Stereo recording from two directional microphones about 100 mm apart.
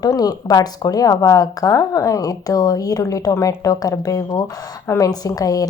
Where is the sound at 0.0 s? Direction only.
40° left (ahead or behind).